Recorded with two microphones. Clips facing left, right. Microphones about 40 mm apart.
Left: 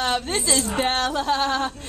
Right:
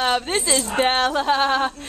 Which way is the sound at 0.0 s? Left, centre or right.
Centre.